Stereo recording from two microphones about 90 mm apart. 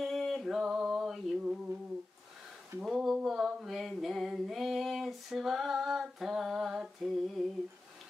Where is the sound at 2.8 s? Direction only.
5° right (ahead or behind).